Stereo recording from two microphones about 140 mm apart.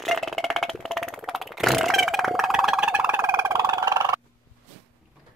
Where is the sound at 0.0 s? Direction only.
Centre (ahead or behind).